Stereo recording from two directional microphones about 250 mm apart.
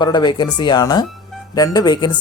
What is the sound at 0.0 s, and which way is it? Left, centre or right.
Speech, centre.